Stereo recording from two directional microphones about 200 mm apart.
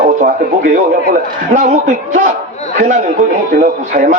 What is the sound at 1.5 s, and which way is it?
Speech, 40° right (ahead or behind).